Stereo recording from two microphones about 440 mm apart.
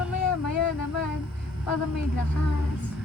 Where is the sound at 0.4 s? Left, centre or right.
Left.